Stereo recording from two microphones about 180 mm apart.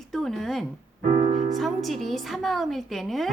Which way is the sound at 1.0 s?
45° right (ahead or behind).